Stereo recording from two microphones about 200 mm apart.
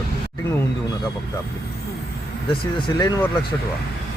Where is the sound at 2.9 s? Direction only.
15° left (ahead or behind).